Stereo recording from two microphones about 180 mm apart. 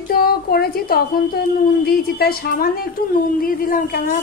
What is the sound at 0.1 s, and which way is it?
A woman's voice, 55° left (ahead or behind).